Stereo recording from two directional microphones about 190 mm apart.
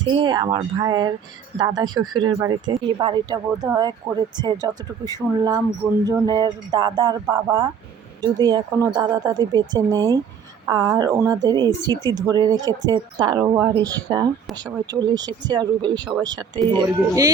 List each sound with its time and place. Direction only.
0.0 s speech: 25° right (ahead or behind)